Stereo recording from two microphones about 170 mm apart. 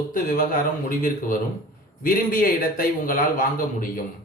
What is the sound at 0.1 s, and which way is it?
Speech, 55° left (ahead or behind).